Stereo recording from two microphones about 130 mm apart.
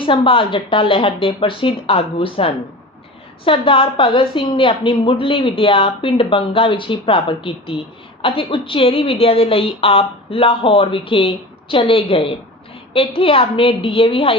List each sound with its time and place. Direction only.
0.0 s a woman's voice: 40° left (ahead or behind)